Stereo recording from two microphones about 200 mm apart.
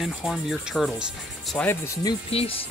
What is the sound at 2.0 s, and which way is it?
Speech, 30° left (ahead or behind).